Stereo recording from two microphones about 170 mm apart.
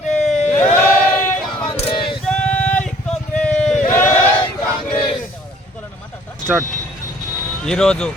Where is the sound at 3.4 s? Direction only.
5° left (ahead or behind).